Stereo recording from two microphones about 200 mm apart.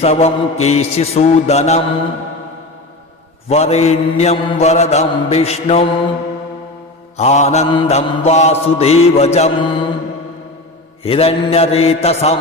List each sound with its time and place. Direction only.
0.0 s mantra: 30° left (ahead or behind)
3.5 s mantra: 30° left (ahead or behind)
7.2 s mantra: 35° left (ahead or behind)
11.0 s mantra: 30° left (ahead or behind)